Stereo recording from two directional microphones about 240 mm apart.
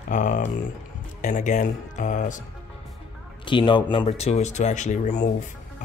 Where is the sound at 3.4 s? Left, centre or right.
Centre.